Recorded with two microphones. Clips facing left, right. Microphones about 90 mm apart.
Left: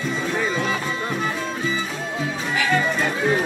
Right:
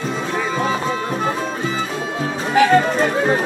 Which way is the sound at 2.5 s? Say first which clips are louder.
Right 9 dB; 45° right (ahead or behind).